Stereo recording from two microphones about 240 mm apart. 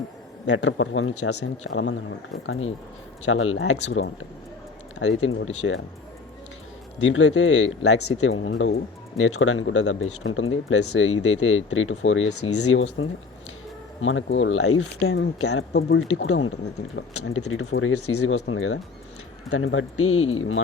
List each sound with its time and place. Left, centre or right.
0.4 s speech: left
1.7 s speech: left
7.0 s speech: left
7.7 s speech: left
15.7 s speech: left
20.1 s speech: left